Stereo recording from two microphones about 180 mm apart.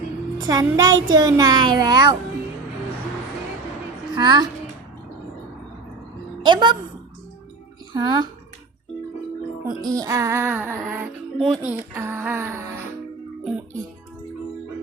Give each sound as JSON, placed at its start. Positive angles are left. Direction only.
{"t": 0.3, "sound": "a child's voice", "side_deg": -20}
{"t": 4.1, "sound": "a child's voice", "side_deg": -25}
{"t": 6.4, "sound": "a woman's voice", "side_deg": -25}
{"t": 7.9, "sound": "a child's voice", "side_deg": -25}
{"t": 9.6, "sound": "speech", "side_deg": -20}
{"t": 11.3, "sound": "speech", "side_deg": 0}